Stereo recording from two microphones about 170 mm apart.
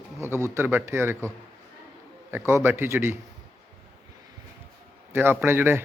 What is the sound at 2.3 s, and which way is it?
Speech, 15° right (ahead or behind).